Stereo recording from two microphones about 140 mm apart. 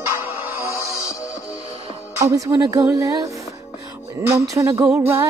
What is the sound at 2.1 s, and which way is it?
Speech, 20° right (ahead or behind).